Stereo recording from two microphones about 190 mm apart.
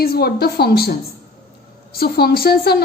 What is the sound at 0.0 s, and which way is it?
Speech, 55° left (ahead or behind).